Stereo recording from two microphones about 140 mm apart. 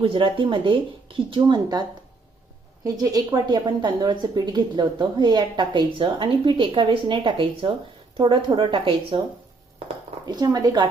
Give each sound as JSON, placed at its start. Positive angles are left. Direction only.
{"t": 0.0, "sound": "a woman's voice", "side_deg": -35}
{"t": 2.8, "sound": "a woman's voice", "side_deg": -25}
{"t": 10.2, "sound": "speech", "side_deg": -30}